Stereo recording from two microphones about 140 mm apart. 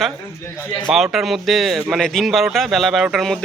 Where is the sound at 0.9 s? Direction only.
5° right (ahead or behind).